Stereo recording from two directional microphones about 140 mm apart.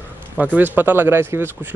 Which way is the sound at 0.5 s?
15° right (ahead or behind).